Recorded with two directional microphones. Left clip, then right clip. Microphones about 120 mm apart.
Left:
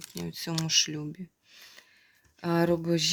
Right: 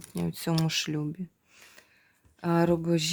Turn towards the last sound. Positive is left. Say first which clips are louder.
# even
turn(degrees=-5)  # may be behind; listen again after turning